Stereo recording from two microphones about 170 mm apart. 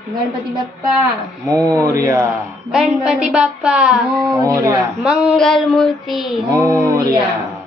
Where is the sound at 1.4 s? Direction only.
20° right (ahead or behind).